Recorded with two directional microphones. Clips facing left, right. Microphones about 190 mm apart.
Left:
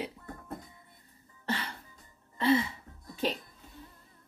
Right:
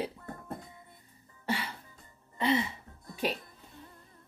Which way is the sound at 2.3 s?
15° right (ahead or behind).